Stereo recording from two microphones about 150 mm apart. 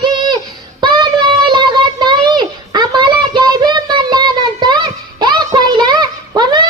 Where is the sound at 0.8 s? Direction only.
30° right (ahead or behind).